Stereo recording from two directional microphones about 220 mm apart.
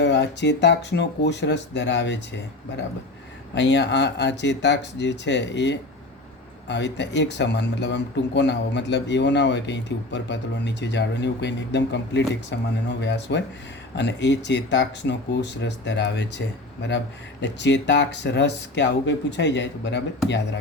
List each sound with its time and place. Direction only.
0.0 s speech: 50° left (ahead or behind)
3.5 s speech: 50° left (ahead or behind)
17.4 s speech: 55° left (ahead or behind)